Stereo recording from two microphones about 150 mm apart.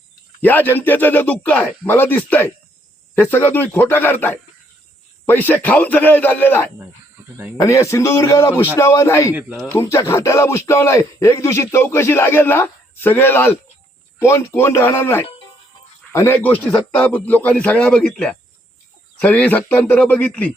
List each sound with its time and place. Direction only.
0.4 s a man's voice: 10° left (ahead or behind)